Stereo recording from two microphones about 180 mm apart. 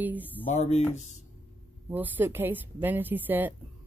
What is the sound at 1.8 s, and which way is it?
Speech, 10° right (ahead or behind).